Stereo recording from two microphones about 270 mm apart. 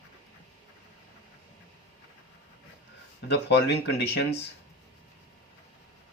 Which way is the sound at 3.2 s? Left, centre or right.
Left.